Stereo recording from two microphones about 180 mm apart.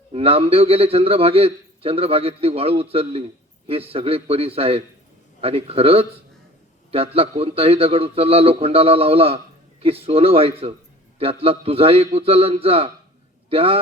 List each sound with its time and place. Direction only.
0.1 s a man's voice: 35° right (ahead or behind)